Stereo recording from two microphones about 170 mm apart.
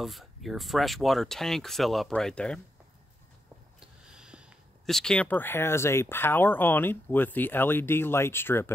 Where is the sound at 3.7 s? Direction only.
5° right (ahead or behind).